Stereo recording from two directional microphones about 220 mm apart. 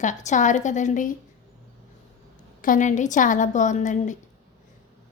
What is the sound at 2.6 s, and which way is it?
A woman's voice, 35° left (ahead or behind).